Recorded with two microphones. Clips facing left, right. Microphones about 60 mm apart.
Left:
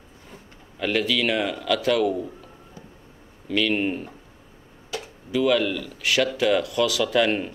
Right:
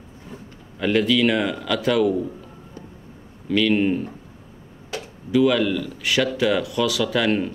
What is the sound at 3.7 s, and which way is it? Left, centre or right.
Speech, centre.